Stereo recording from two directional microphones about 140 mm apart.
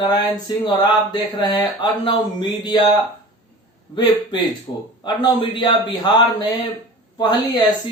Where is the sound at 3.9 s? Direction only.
35° left (ahead or behind).